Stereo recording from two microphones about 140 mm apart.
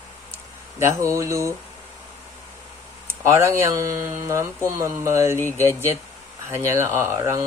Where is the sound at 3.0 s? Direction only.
20° right (ahead or behind).